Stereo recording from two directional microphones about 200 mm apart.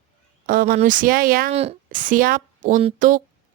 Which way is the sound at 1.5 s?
30° right (ahead or behind).